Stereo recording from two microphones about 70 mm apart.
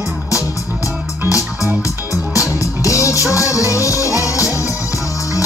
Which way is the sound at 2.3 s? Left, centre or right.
Left.